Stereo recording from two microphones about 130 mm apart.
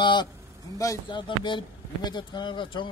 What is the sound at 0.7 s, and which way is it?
Speech, 25° left (ahead or behind).